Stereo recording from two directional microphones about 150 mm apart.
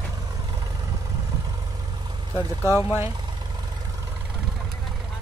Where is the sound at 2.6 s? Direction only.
15° right (ahead or behind).